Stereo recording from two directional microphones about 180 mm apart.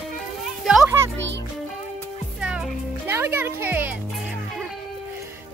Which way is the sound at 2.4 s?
5° right (ahead or behind).